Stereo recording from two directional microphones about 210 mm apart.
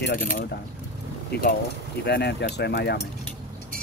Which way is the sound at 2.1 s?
50° left (ahead or behind).